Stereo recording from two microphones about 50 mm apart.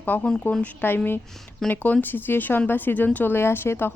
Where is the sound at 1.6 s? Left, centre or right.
Centre.